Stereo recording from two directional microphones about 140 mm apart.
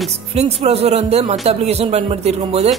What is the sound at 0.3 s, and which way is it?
Speech, 50° right (ahead or behind).